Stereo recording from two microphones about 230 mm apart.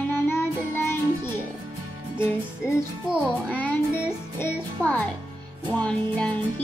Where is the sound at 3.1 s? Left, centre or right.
Centre.